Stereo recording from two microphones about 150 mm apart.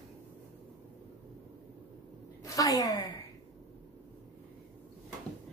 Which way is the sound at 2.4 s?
25° left (ahead or behind).